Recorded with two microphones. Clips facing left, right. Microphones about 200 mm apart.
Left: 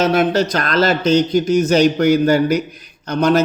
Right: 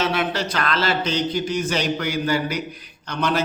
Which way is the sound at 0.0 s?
40° left (ahead or behind).